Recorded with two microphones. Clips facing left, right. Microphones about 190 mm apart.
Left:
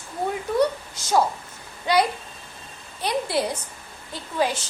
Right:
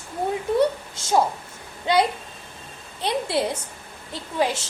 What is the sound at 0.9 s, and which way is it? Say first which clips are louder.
A child's voice: even; 25° right (ahead or behind).